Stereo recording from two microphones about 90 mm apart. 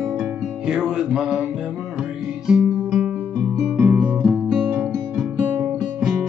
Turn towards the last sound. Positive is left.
turn(degrees=-5)  # may be behind; listen again after turning